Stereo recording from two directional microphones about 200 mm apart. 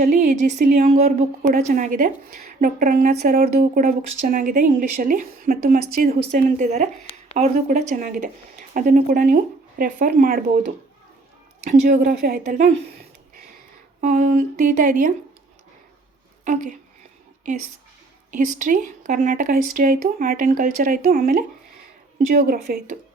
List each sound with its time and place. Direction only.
0.0 s a woman's voice: 40° right (ahead or behind)
11.7 s speech: 45° right (ahead or behind)
14.0 s speech: 40° right (ahead or behind)
16.4 s a woman's voice: 40° right (ahead or behind)
18.3 s a woman's voice: 40° right (ahead or behind)